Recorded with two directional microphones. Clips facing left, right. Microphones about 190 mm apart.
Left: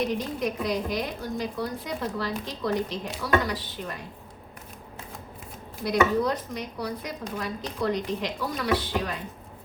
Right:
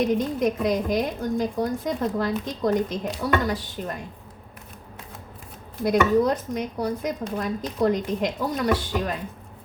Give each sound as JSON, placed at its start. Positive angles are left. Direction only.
{"t": 0.1, "sound": "speech", "side_deg": -45}
{"t": 5.8, "sound": "speech", "side_deg": -45}